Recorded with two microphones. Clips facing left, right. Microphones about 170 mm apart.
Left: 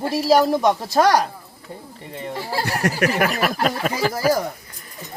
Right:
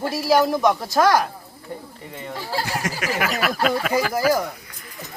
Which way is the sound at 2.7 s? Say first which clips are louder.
Left 5 dB; 65° left (ahead or behind).